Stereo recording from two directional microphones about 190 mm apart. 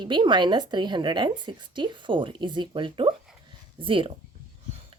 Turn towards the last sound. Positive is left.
turn(degrees=-25)  # may be behind; listen again after turning